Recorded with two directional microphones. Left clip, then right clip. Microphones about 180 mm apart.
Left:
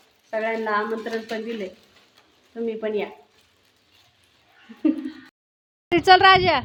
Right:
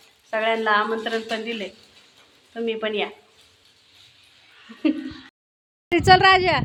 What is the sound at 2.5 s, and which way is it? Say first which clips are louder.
Speech: right 1 dB; centre (ahead or behind).